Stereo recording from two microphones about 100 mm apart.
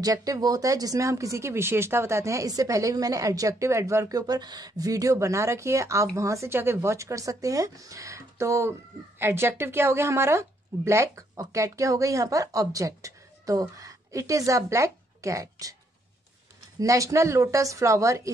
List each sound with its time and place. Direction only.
0.0 s speech: 35° right (ahead or behind)
16.8 s speech: 35° right (ahead or behind)